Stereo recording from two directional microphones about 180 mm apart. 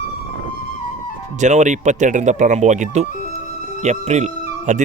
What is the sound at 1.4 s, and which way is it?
Speech, 40° right (ahead or behind).